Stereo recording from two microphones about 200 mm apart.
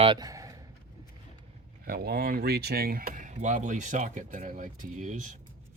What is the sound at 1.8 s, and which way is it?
Speech, 50° right (ahead or behind).